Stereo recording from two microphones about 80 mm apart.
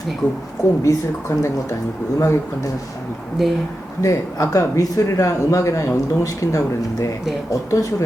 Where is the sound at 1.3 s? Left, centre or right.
Left.